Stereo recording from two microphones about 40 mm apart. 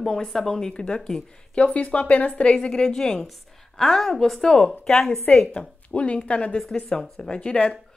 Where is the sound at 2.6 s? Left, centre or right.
Left.